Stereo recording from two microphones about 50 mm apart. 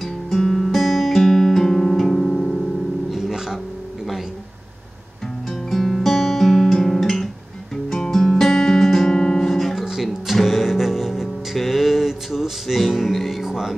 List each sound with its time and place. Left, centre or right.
0.0 s guitar: centre
3.1 s music: centre
5.5 s guitar: centre
9.8 s music: centre